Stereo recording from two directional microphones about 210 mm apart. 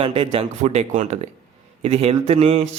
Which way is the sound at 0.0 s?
25° right (ahead or behind).